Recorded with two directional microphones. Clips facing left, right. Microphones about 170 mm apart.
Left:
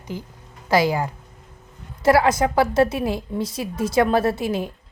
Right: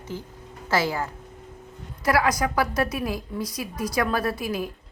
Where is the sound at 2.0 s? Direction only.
25° left (ahead or behind).